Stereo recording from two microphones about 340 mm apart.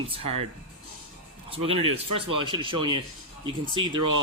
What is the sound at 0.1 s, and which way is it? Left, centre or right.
Speech, centre.